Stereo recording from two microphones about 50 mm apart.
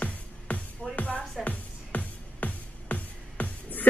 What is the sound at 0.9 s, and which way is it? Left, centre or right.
Speech, left.